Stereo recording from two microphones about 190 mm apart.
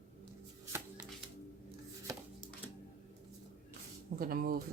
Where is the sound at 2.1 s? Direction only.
15° right (ahead or behind).